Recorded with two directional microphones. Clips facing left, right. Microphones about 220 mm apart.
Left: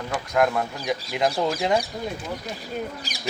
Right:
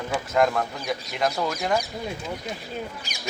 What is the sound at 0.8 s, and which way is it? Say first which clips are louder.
Speech: left 2 dB; 15° left (ahead or behind).